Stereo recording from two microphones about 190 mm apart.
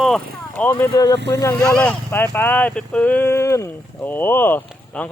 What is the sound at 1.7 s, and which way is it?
Speech, 5° left (ahead or behind).